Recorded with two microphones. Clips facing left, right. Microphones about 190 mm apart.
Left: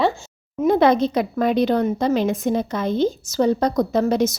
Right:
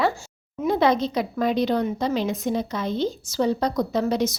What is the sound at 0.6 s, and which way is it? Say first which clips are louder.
A woman's voice: left 5 dB; 55° left (ahead or behind).